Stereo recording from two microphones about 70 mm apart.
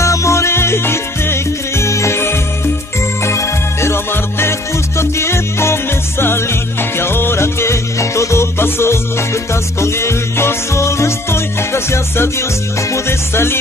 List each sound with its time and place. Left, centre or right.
0.0 s music: left